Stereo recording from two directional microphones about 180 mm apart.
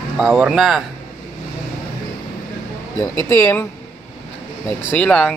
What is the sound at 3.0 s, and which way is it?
Speech, 15° left (ahead or behind).